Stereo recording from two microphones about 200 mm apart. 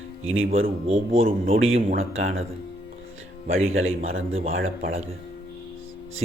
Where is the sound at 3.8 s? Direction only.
80° right.